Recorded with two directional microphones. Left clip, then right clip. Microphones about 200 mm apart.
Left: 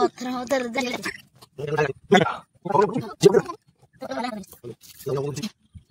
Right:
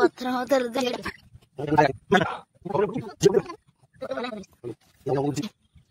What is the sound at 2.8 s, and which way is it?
Speech, 30° left (ahead or behind).